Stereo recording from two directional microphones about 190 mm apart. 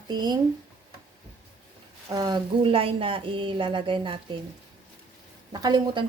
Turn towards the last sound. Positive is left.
turn(degrees=-20)  # may be behind; listen again after turning